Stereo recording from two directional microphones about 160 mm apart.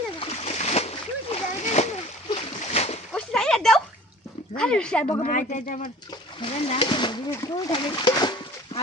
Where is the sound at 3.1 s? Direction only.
5° left (ahead or behind).